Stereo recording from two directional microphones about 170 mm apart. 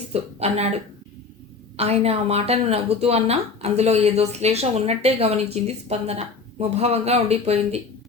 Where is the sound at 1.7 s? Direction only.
35° right (ahead or behind).